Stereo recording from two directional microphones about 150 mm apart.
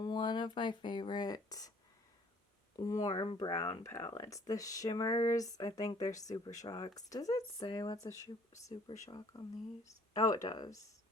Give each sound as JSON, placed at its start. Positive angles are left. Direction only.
{"t": 0.0, "sound": "speech", "side_deg": 30}
{"t": 2.7, "sound": "speech", "side_deg": 25}